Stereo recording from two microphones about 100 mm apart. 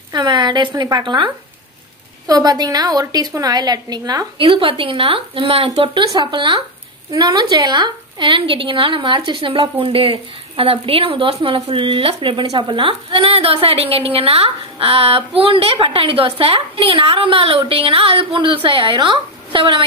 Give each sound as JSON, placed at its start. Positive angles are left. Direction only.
{"t": 0.1, "sound": "speech", "side_deg": -50}
{"t": 2.2, "sound": "a woman's voice", "side_deg": -40}
{"t": 4.4, "sound": "speech", "side_deg": -60}
{"t": 5.9, "sound": "speech", "side_deg": -50}